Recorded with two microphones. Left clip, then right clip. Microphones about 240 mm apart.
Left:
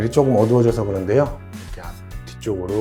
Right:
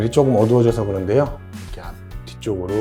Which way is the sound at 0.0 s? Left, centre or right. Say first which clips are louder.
Even; left.